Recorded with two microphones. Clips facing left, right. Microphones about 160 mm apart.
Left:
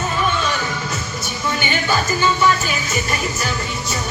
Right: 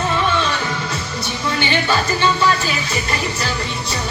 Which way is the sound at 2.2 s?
30° right (ahead or behind).